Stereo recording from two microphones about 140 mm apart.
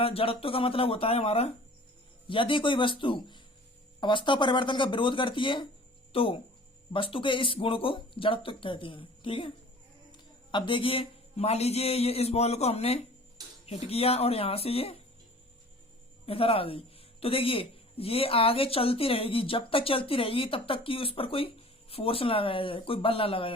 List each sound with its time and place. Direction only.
0.0 s a man's voice: 45° left (ahead or behind)
16.2 s speech: 45° left (ahead or behind)